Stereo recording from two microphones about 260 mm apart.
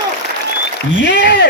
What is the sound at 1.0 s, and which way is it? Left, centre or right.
Speech, left.